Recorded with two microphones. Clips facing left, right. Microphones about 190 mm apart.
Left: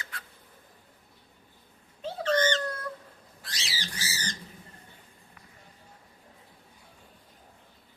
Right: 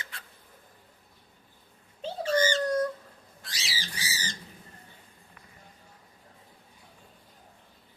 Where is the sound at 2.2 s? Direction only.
10° right (ahead or behind).